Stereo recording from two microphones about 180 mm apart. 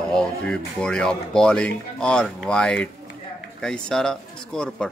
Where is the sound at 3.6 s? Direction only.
5° left (ahead or behind).